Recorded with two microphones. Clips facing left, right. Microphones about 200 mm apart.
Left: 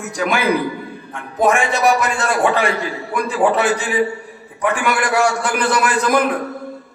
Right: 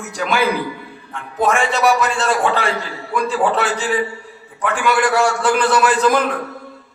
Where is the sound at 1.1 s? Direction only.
15° left (ahead or behind).